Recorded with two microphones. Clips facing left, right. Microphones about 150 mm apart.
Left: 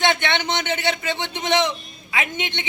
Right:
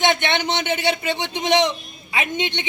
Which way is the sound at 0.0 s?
20° right (ahead or behind).